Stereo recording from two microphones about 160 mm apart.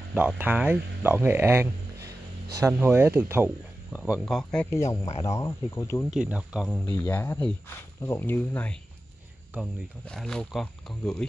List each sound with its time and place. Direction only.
0.1 s speech: 10° right (ahead or behind)
4.0 s speech: centre (ahead or behind)
5.2 s speech: 20° left (ahead or behind)
6.0 s speech: 5° right (ahead or behind)
6.9 s speech: 15° left (ahead or behind)
9.5 s speech: 10° right (ahead or behind)
10.0 s speech: 5° left (ahead or behind)